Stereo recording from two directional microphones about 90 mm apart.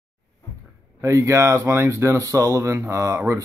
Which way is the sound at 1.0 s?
35° right (ahead or behind).